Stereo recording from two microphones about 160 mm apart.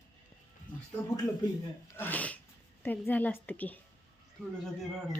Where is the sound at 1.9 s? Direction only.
10° left (ahead or behind).